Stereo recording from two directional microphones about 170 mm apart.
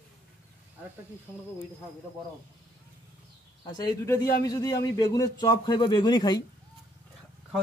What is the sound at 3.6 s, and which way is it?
Speech, 20° left (ahead or behind).